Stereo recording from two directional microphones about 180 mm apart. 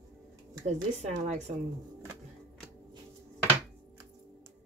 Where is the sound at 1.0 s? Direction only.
40° right (ahead or behind).